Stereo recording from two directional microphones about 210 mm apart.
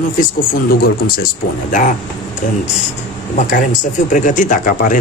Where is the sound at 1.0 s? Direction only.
45° left (ahead or behind).